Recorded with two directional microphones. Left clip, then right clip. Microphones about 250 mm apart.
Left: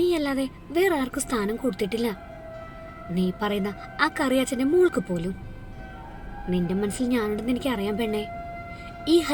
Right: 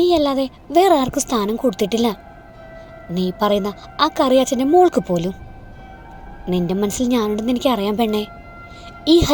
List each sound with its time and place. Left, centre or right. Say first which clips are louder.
0.0 s a woman's voice: right 8 dB; right
3.2 s a woman's voice: right 9 dB; right
6.5 s a woman's voice: right 7 dB; right